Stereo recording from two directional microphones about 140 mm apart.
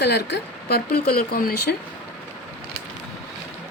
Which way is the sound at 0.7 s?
90° left.